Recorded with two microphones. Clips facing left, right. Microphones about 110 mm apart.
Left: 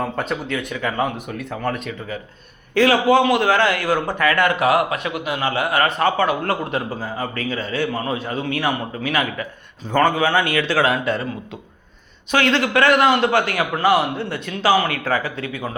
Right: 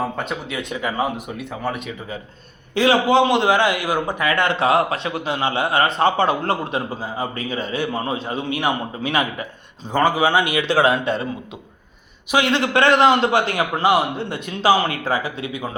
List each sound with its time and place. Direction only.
0.0 s speech: 5° right (ahead or behind)
0.5 s a man's voice: 20° right (ahead or behind); by 1.9 s 5° right (ahead or behind)
2.7 s a man's voice: 20° right (ahead or behind)
12.3 s a man's voice: 15° right (ahead or behind)